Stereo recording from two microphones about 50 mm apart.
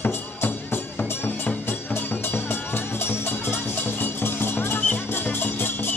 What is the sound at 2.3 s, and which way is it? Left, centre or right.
Music, left.